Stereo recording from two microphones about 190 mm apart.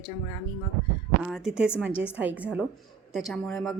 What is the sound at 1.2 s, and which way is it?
A woman's voice, centre (ahead or behind).